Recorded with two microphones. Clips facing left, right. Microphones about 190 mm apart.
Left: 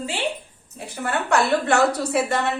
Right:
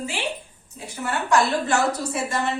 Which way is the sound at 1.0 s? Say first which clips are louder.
Even; 60° left (ahead or behind).